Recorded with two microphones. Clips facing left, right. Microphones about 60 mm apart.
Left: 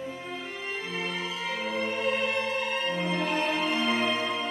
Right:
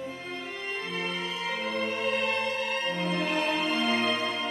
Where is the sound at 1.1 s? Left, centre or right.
Centre.